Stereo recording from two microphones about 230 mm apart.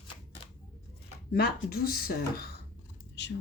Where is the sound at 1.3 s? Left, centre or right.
Left.